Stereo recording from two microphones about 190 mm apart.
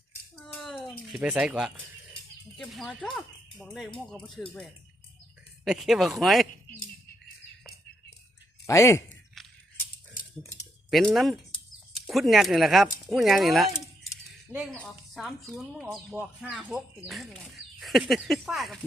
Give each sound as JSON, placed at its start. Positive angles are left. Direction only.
{"t": 0.4, "sound": "a sound", "side_deg": 0}
{"t": 1.0, "sound": "speech", "side_deg": -5}
{"t": 8.6, "sound": "speech", "side_deg": 15}
{"t": 10.9, "sound": "speech", "side_deg": 0}